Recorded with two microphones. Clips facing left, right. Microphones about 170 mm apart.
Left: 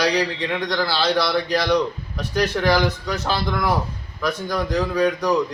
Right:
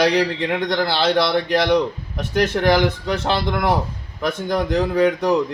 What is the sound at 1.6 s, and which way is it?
Speech, 25° right (ahead or behind).